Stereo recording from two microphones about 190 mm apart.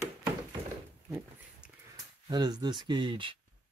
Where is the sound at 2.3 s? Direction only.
20° right (ahead or behind).